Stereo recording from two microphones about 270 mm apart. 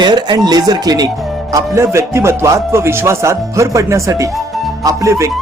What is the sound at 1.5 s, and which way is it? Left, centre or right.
Speech, centre.